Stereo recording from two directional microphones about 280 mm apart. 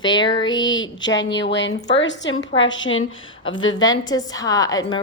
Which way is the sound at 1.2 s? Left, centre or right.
Left.